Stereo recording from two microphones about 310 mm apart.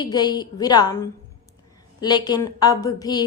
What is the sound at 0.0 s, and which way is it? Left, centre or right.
A woman's voice, centre.